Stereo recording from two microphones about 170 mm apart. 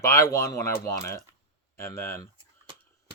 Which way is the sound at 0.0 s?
15° left (ahead or behind).